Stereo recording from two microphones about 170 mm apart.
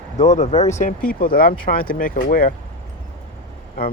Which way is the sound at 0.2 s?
40° left (ahead or behind).